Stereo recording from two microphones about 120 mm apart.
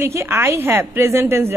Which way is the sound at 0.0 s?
20° right (ahead or behind).